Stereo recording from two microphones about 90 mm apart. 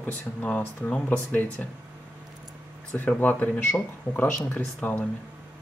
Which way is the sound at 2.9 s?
20° left (ahead or behind).